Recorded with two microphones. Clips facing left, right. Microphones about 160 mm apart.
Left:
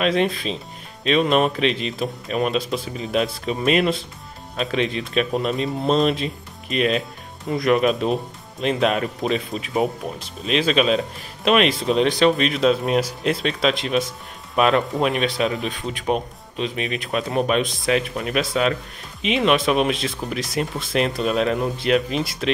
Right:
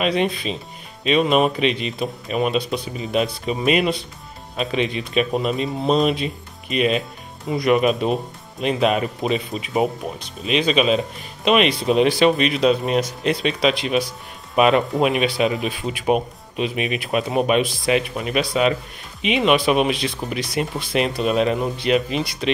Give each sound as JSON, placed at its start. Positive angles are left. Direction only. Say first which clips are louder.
{"t": 0.0, "sound": "speech", "louder": "even", "side_deg": 0}